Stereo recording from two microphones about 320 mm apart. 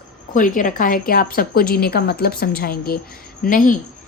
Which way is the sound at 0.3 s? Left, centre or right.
Left.